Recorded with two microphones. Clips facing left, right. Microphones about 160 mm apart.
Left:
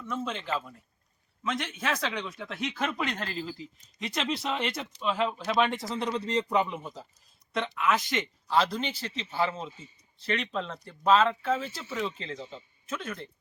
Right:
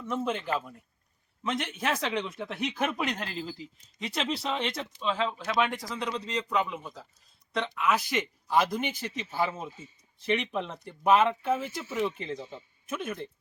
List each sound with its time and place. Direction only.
0.1 s speech: 15° right (ahead or behind); by 4.9 s centre (ahead or behind)
4.9 s speech: 15° left (ahead or behind)
7.5 s speech: centre (ahead or behind)